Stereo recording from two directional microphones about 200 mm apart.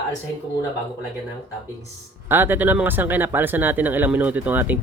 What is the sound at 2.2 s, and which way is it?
Speech, 10° right (ahead or behind).